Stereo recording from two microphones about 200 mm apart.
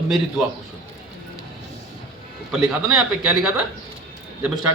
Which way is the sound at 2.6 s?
15° right (ahead or behind).